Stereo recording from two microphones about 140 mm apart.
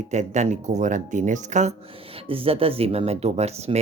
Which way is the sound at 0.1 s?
55° right (ahead or behind).